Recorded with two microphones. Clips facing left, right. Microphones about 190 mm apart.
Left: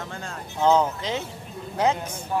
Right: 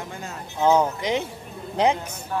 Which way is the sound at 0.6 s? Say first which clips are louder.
Right 1 dB; 10° right (ahead or behind).